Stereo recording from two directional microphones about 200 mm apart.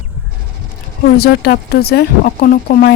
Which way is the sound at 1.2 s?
55° left (ahead or behind).